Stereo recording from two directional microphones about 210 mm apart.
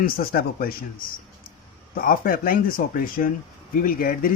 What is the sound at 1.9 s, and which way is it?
Speech, 40° left (ahead or behind).